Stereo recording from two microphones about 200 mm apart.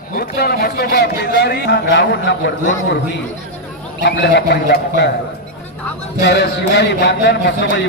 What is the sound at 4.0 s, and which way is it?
A man's voice, 60° left (ahead or behind).